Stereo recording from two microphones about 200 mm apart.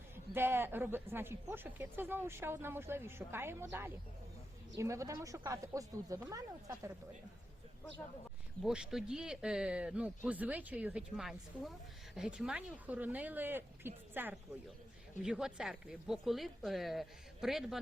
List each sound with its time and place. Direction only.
0.3 s a woman's voice: 10° right (ahead or behind)
8.6 s a woman's voice: 5° right (ahead or behind)